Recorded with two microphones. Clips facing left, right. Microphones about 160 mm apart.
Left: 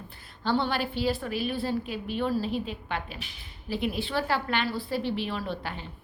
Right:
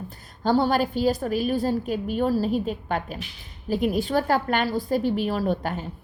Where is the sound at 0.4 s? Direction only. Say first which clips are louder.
Right 6 dB; 40° right (ahead or behind).